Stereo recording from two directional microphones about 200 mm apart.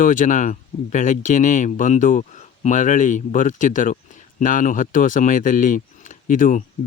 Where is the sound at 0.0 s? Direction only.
40° left (ahead or behind).